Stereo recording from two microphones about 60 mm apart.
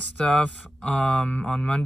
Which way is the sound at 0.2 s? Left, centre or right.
Centre.